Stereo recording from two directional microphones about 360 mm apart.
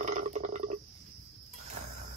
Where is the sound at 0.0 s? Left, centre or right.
Right.